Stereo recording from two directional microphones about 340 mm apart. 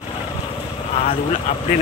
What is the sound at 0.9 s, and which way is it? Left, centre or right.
Vehicle, centre.